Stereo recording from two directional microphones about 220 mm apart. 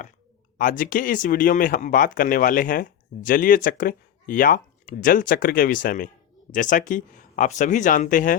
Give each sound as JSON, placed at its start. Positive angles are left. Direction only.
{"t": 0.6, "sound": "speech", "side_deg": 40}